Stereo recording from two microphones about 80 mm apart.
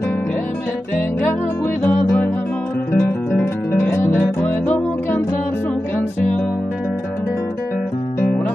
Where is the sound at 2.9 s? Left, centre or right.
Left.